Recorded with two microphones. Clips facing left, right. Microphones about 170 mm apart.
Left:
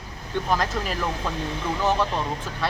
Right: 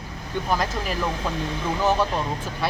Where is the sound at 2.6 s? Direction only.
10° right (ahead or behind).